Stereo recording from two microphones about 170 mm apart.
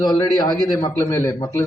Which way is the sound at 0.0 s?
25° left (ahead or behind).